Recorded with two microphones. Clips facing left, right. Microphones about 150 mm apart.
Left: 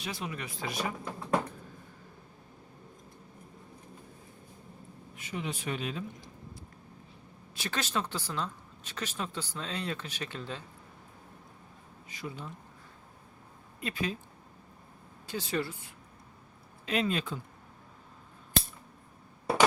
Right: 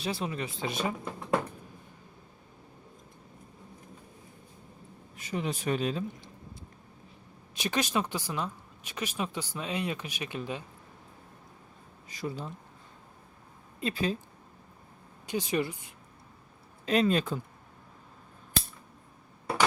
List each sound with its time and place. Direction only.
0.0 s speech: 30° right (ahead or behind)
5.1 s speech: 40° right (ahead or behind)
7.5 s speech: 15° right (ahead or behind)
12.0 s speech: 35° right (ahead or behind)
13.8 s speech: 30° right (ahead or behind)
15.3 s speech: 15° right (ahead or behind)
16.8 s speech: 40° right (ahead or behind)